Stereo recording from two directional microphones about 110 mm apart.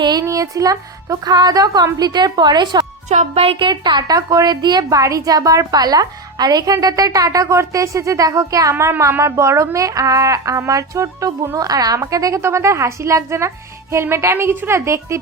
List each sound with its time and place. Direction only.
0.0 s a woman's voice: 35° right (ahead or behind)
3.1 s music: 70° right (ahead or behind)
3.7 s a woman's voice: 40° right (ahead or behind); by 15.2 s 25° right (ahead or behind)